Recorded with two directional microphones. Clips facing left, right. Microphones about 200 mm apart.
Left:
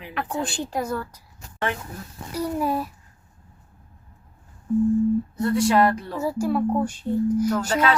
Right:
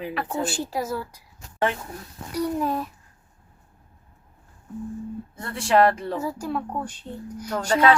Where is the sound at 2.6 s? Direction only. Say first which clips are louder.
Left 1 dB; 10° left (ahead or behind).